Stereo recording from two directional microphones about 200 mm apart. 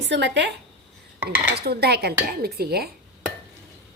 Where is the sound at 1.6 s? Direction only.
55° right (ahead or behind).